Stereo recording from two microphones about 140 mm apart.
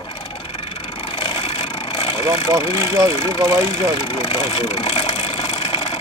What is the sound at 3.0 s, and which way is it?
Speech, 35° left (ahead or behind).